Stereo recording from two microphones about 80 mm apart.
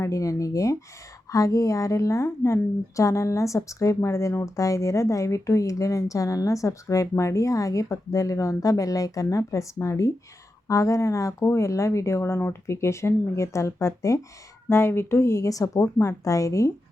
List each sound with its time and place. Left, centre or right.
0.0 s a woman's voice: left